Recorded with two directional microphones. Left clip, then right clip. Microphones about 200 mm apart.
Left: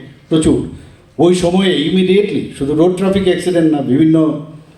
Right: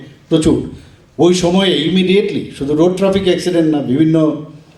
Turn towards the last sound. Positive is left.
turn(degrees=-40)  # may be behind; listen again after turning